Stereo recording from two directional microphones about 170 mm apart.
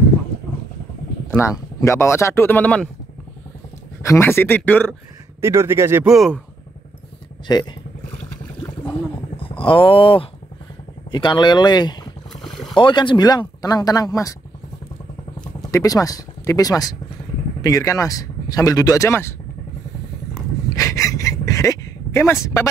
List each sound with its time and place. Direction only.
1.8 s speech: 15° left (ahead or behind)
4.0 s speech: 15° left (ahead or behind)
5.4 s speech: 15° right (ahead or behind)
6.1 s speech: centre (ahead or behind)
7.5 s speech: 25° left (ahead or behind)
9.4 s speech: 30° left (ahead or behind)
12.4 s boat: centre (ahead or behind)
12.7 s speech: 30° left (ahead or behind)
15.7 s speech: 20° left (ahead or behind)
20.7 s a sound: 20° left (ahead or behind)